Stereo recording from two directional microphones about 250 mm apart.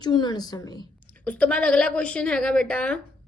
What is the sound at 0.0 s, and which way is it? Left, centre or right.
Speech, centre.